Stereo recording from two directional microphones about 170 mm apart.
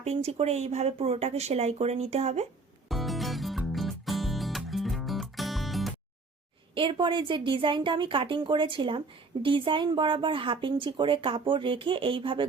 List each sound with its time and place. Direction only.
0.0 s speech: 40° right (ahead or behind)
2.9 s music: centre (ahead or behind)
6.7 s speech: 30° right (ahead or behind)